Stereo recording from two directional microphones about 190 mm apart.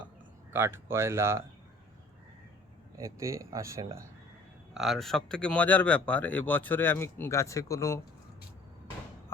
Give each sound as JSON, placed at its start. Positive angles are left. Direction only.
{"t": 0.5, "sound": "speech", "side_deg": -10}
{"t": 3.0, "sound": "speech", "side_deg": -15}
{"t": 4.7, "sound": "speech", "side_deg": 0}